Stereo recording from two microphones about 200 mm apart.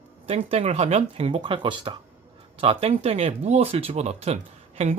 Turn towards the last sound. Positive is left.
turn(degrees=-30)  # may be behind; listen again after turning